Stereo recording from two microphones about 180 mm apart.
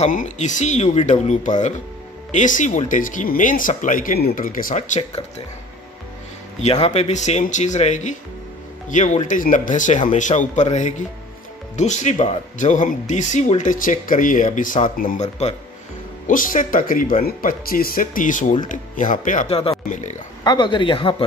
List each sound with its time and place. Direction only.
0.0 s speech: 45° left (ahead or behind)
6.6 s speech: 35° left (ahead or behind)
20.4 s speech: 25° left (ahead or behind)